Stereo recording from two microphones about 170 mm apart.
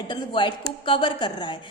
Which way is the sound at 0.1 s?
30° left (ahead or behind).